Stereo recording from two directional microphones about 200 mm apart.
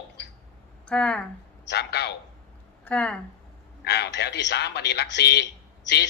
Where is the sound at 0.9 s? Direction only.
5° left (ahead or behind).